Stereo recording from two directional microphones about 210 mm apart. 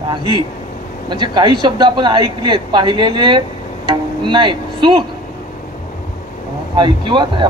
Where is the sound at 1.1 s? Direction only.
20° right (ahead or behind).